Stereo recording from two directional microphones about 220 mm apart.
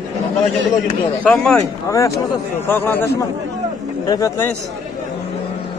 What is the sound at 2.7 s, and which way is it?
Speech, 10° left (ahead or behind).